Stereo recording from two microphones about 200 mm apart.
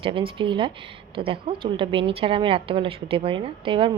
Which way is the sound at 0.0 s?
25° right (ahead or behind).